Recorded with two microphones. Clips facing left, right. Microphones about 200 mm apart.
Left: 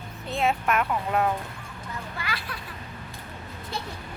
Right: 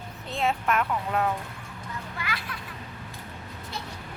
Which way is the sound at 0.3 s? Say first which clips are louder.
Left 1 dB; 5° left (ahead or behind).